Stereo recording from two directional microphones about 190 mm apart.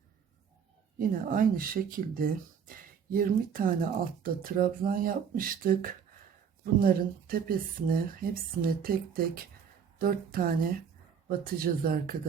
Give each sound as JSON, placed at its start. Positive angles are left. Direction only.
{"t": 0.9, "sound": "speech", "side_deg": -45}